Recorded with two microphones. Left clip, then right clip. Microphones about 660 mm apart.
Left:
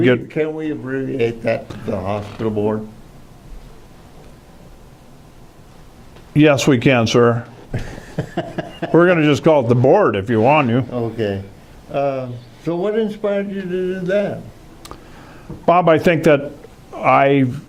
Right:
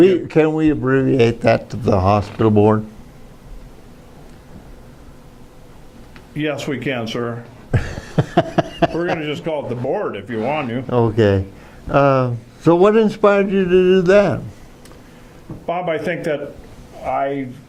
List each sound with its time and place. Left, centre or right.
0.3 s speech: right
6.3 s speech: left
7.7 s a sound: right
9.0 s speech: left
10.9 s speech: right
15.6 s a man's voice: left